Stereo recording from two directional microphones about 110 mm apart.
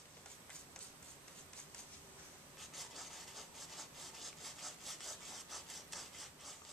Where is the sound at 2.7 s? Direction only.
Centre (ahead or behind).